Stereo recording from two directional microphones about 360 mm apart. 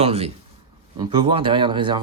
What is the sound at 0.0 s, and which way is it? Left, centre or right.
Speech, centre.